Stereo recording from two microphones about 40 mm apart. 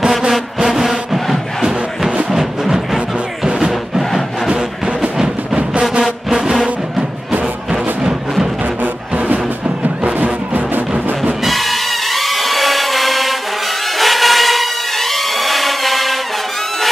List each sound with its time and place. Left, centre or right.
0.7 s music: centre
4.5 s music: right
8.8 s music: right
11.4 s music: centre
13.9 s a sound: centre